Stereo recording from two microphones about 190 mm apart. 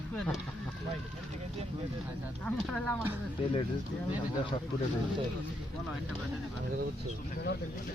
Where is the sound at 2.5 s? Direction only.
5° left (ahead or behind).